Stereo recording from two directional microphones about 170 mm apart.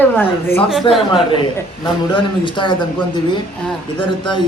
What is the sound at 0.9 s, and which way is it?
Speech, 30° left (ahead or behind).